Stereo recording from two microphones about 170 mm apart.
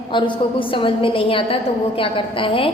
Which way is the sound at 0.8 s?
30° left (ahead or behind).